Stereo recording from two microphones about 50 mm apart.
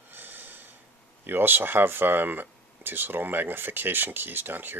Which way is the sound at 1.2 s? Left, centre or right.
Right.